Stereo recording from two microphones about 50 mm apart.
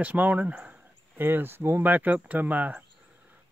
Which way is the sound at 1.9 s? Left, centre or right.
Right.